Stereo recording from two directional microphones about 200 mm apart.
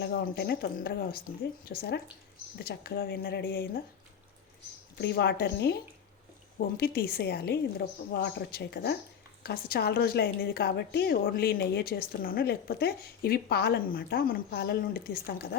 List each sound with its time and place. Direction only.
0.0 s a woman's voice: 50° left (ahead or behind)
4.9 s a woman's voice: 55° left (ahead or behind)